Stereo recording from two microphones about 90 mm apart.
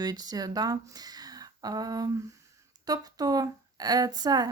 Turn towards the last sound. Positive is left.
turn(degrees=-50)  # may be behind; listen again after turning